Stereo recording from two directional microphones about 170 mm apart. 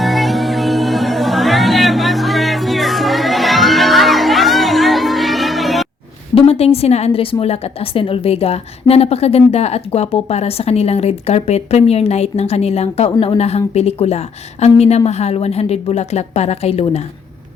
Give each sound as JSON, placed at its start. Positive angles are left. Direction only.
{"t": 0.0, "sound": "music", "side_deg": 0}
{"t": 6.3, "sound": "a woman's voice", "side_deg": 35}